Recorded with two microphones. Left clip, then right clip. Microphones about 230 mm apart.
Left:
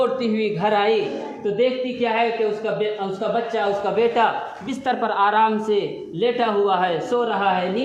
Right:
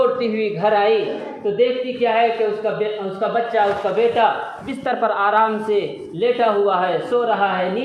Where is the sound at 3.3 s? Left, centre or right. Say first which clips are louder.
Right 5 dB; left.